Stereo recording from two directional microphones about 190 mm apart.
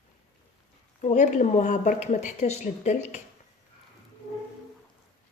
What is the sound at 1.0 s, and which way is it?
Speech, 40° left (ahead or behind).